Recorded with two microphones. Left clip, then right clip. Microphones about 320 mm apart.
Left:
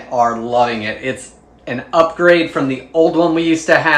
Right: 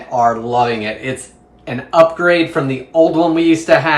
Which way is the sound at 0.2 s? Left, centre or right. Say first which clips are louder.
Even; centre.